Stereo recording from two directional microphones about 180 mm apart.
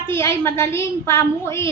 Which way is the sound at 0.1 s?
15° left (ahead or behind).